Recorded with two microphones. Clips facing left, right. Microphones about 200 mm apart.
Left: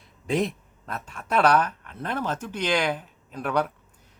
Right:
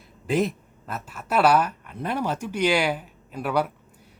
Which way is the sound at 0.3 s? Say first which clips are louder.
Right 2 dB; centre (ahead or behind).